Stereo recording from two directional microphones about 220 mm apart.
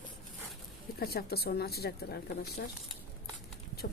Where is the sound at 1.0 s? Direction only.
45° left (ahead or behind).